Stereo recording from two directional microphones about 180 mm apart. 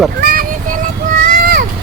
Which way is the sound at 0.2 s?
55° right (ahead or behind).